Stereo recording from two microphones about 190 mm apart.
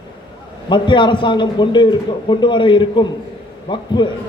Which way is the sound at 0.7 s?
25° left (ahead or behind).